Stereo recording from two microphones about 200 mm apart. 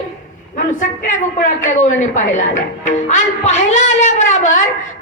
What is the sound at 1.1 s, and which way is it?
A woman's voice, 40° left (ahead or behind).